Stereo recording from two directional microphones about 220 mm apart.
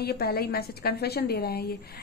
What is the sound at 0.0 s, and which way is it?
Speech, 45° left (ahead or behind).